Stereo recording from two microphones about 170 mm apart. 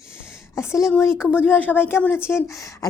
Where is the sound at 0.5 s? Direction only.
15° left (ahead or behind).